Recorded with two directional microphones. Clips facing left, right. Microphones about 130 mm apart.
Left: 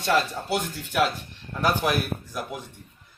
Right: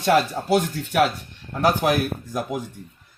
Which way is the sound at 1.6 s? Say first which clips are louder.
Right 4 dB; 40° right (ahead or behind).